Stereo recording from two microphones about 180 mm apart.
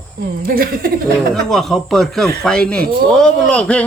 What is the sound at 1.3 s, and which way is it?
Speech, centre (ahead or behind).